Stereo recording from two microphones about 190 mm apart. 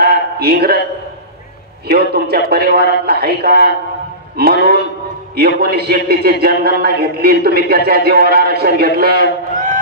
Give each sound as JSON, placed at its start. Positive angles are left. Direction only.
{"t": 0.0, "sound": "a sound", "side_deg": -55}
{"t": 1.9, "sound": "speech", "side_deg": -55}
{"t": 5.6, "sound": "speech", "side_deg": -55}